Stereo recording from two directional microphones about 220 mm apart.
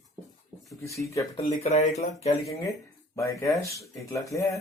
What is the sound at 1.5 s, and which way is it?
Speech, 30° left (ahead or behind).